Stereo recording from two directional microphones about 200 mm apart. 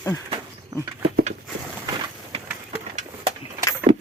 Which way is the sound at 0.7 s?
20° right (ahead or behind).